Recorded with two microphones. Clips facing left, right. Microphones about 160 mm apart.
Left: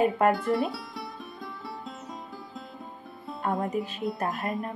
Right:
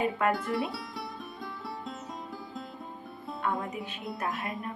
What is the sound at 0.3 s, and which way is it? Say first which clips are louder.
Music: left 4 dB; centre (ahead or behind).